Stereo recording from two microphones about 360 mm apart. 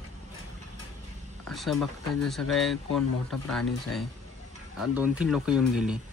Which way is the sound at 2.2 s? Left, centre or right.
Centre.